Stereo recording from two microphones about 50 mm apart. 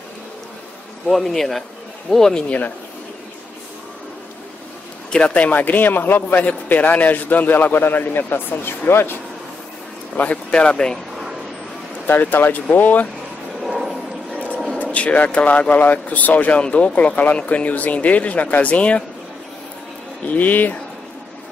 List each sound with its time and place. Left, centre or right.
1.0 s speech: centre
5.1 s a man's voice: left
10.1 s a man's voice: left
10.5 s speech: centre
12.1 s a man's voice: left
13.6 s a sound: centre
14.8 s a man's voice: left
20.2 s a man's voice: left